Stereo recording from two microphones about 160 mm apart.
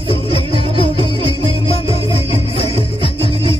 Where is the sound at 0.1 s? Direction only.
35° right (ahead or behind).